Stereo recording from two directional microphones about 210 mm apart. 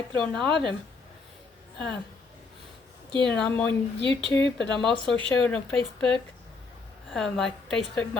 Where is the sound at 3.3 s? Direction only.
5° left (ahead or behind).